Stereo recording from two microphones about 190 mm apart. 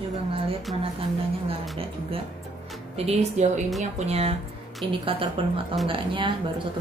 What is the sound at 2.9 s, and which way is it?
A woman's voice, 35° right (ahead or behind).